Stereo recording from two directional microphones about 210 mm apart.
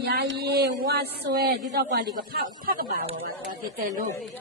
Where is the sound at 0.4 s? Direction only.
50° right (ahead or behind).